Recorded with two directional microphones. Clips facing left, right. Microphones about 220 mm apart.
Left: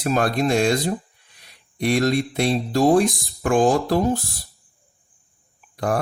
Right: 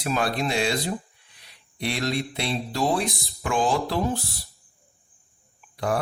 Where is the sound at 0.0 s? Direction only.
45° left (ahead or behind).